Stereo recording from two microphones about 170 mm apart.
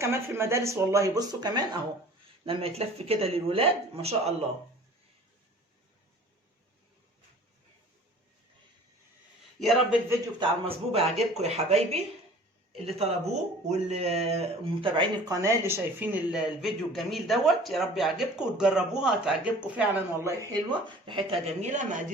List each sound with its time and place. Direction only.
0.0 s speech: 15° right (ahead or behind); by 4.4 s 35° right (ahead or behind)
9.6 s a man's voice: centre (ahead or behind)
10.7 s speech: 35° right (ahead or behind); by 20.3 s 10° right (ahead or behind)
20.5 s speech: 30° right (ahead or behind)